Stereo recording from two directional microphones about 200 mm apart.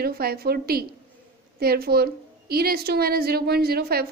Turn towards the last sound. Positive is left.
turn(degrees=-50)  # may be behind; listen again after turning